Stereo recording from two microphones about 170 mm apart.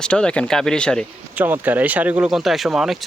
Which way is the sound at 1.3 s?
10° right (ahead or behind).